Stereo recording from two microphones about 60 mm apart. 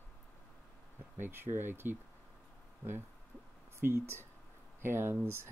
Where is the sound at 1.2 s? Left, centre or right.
Right.